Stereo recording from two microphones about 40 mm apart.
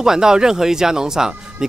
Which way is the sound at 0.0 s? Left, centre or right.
Centre.